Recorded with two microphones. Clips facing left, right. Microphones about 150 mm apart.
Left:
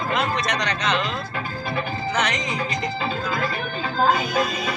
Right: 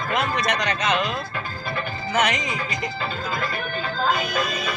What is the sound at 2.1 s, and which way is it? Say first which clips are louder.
Music: right 3 dB; 10° right (ahead or behind).